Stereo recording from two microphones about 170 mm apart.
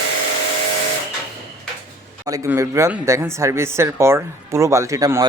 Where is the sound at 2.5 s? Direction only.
15° right (ahead or behind).